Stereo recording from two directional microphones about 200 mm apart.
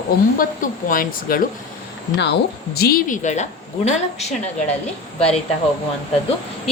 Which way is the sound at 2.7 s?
50° left (ahead or behind).